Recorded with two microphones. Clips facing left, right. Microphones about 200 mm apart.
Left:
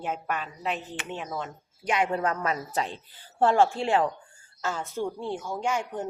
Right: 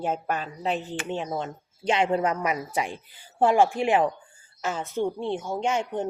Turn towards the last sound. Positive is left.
turn(degrees=-25)  # may be behind; listen again after turning